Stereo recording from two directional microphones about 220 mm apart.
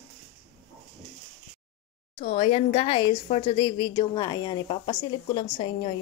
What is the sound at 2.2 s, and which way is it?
A woman's voice, 30° left (ahead or behind).